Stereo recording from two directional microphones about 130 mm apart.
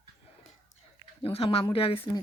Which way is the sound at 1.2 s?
50° left (ahead or behind).